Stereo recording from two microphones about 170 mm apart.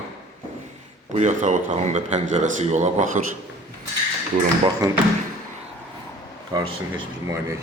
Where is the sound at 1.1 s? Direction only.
45° right (ahead or behind).